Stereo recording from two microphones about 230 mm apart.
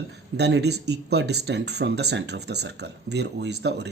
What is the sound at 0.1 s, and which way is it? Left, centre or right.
Speech, right.